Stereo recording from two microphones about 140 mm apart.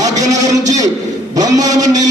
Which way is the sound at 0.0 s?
25° right (ahead or behind).